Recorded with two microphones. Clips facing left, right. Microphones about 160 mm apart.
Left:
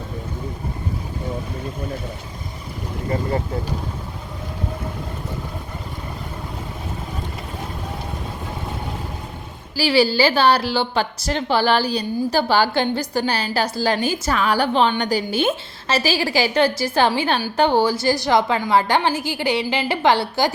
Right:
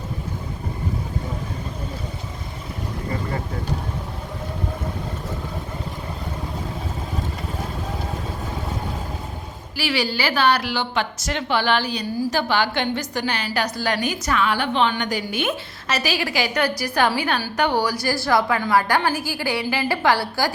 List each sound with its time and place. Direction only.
9.7 s a woman's voice: 30° left (ahead or behind)